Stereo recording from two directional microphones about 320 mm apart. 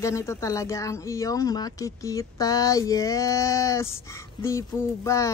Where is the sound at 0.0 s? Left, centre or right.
Centre.